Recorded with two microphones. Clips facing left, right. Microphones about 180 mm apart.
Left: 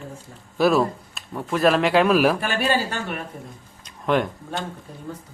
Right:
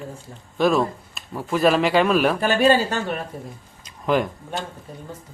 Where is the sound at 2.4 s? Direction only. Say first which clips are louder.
Right 6 dB; 40° right (ahead or behind).